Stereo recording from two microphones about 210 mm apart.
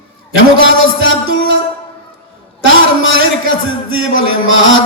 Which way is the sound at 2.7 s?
70° left (ahead or behind).